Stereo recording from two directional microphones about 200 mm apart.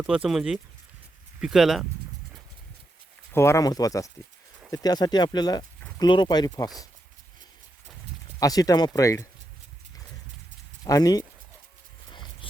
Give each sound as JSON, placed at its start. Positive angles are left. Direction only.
{"t": 0.0, "sound": "speech", "side_deg": -5}
{"t": 3.3, "sound": "speech", "side_deg": 15}
{"t": 8.4, "sound": "speech", "side_deg": 20}
{"t": 10.8, "sound": "speech", "side_deg": 20}